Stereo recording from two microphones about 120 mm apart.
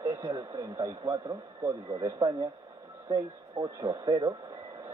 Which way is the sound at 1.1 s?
25° right (ahead or behind).